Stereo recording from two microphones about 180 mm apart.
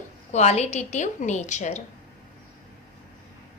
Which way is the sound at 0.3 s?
35° left (ahead or behind).